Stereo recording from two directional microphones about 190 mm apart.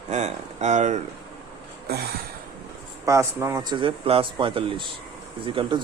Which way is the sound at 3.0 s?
15° right (ahead or behind).